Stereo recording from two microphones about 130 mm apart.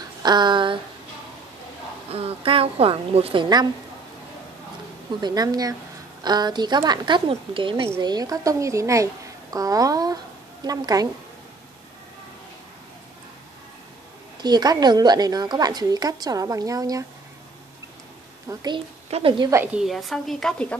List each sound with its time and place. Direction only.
0.2 s a sound: 35° right (ahead or behind)
2.1 s a woman's voice: 45° right (ahead or behind)
5.2 s a woman's voice: 30° right (ahead or behind)
14.4 s a woman's voice: 30° right (ahead or behind)
18.5 s a woman's voice: 30° right (ahead or behind)
19.0 s a woman's voice: 50° right (ahead or behind)
19.5 s a woman's voice: 15° right (ahead or behind)
19.8 s speech: centre (ahead or behind)